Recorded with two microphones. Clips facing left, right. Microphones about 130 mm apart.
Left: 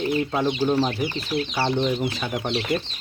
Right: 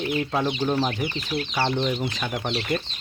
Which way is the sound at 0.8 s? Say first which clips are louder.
Left 2 dB; centre (ahead or behind).